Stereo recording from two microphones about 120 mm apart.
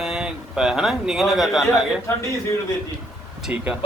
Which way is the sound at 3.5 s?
15° right (ahead or behind).